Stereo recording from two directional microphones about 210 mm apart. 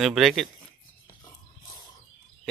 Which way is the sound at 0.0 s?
Centre (ahead or behind).